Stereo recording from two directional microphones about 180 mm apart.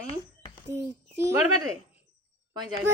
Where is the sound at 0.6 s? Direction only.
15° right (ahead or behind).